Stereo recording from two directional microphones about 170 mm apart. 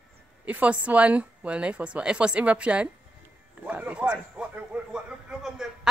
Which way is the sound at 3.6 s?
10° right (ahead or behind).